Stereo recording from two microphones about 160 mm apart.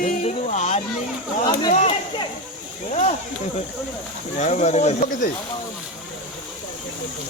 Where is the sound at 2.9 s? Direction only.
45° left (ahead or behind).